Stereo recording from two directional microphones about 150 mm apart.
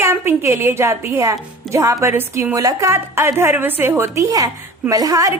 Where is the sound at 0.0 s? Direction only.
15° right (ahead or behind).